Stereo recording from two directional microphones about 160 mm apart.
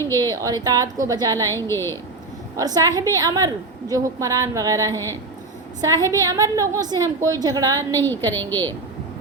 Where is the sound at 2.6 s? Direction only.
20° right (ahead or behind).